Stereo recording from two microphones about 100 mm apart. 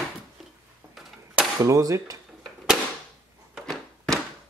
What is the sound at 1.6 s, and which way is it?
Speech, 35° right (ahead or behind).